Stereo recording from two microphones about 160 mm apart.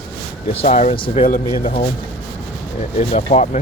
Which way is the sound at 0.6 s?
45° left (ahead or behind).